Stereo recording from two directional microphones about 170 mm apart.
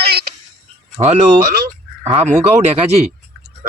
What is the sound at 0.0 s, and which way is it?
Music, 65° right (ahead or behind).